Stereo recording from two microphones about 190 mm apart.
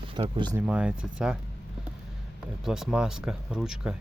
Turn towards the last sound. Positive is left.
turn(degrees=-5)  # may be behind; listen again after turning